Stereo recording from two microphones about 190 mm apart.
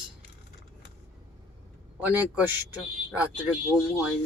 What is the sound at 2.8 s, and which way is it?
Speech, 5° right (ahead or behind).